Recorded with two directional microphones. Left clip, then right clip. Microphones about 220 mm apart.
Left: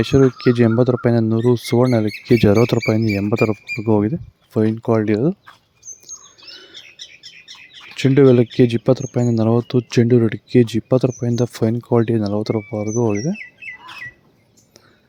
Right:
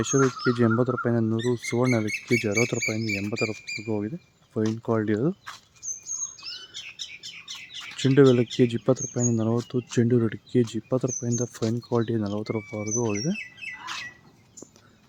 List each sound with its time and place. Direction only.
0.3 s speech: 30° left (ahead or behind)
4.8 s speech: 30° left (ahead or behind)
7.9 s speech: 30° left (ahead or behind)